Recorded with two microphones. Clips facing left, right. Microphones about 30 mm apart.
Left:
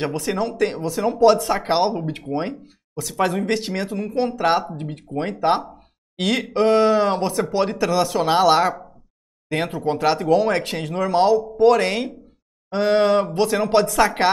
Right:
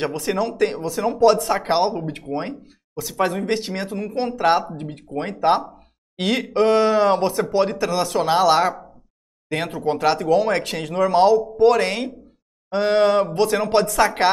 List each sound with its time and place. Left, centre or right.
0.3 s speech: centre